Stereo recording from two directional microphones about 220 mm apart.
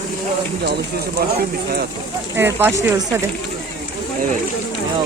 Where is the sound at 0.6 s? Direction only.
45° right (ahead or behind).